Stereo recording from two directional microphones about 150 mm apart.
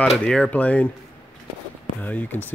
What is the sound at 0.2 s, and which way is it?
Speech, 5° left (ahead or behind).